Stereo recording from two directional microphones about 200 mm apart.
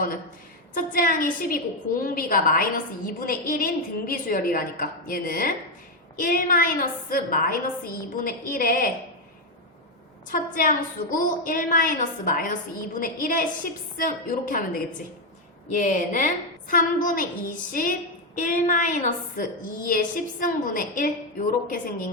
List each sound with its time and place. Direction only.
0.7 s a woman's voice: 45° left (ahead or behind)
10.2 s a woman's voice: 45° left (ahead or behind)